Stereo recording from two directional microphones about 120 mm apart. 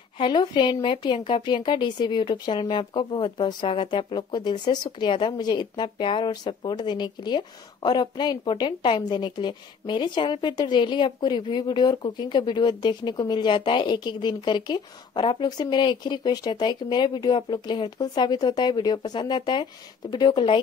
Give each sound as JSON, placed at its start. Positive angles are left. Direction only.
{"t": 0.2, "sound": "a woman's voice", "side_deg": 40}